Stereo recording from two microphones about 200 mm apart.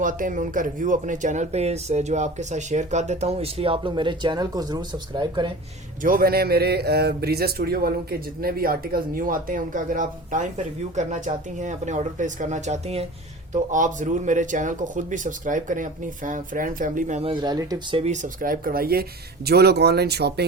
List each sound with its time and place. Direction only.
0.0 s speech: 40° right (ahead or behind); by 5.5 s 25° right (ahead or behind)
6.0 s a man's voice: 45° right (ahead or behind); by 18.0 s 20° right (ahead or behind)
18.0 s a man's voice: 35° right (ahead or behind); by 20.4 s 55° right (ahead or behind)